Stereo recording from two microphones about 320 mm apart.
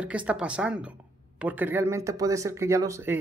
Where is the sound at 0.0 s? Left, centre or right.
Centre.